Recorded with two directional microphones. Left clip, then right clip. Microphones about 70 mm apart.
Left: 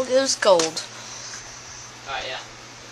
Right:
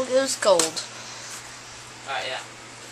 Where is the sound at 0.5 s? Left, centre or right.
Centre.